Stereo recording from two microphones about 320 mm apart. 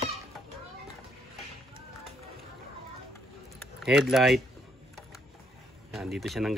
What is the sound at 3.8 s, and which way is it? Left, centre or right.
Speech, centre.